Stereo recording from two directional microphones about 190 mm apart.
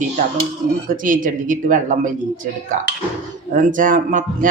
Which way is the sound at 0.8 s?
45° right (ahead or behind).